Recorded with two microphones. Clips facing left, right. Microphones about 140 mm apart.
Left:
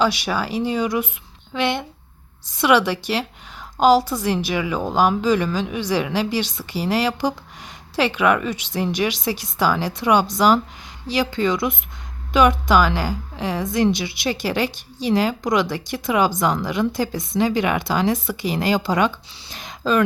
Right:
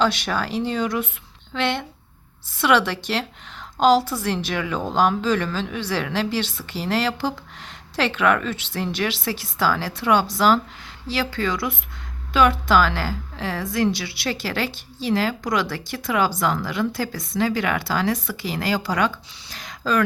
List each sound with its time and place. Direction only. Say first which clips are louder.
0.0 s a woman's voice: left 1 dB; 10° left (ahead or behind)